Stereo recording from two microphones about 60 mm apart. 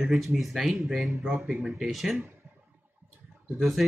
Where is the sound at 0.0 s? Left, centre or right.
Centre.